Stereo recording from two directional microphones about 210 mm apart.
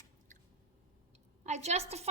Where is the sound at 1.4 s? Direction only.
30° right (ahead or behind).